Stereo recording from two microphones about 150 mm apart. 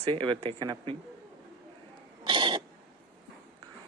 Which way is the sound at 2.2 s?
35° right (ahead or behind).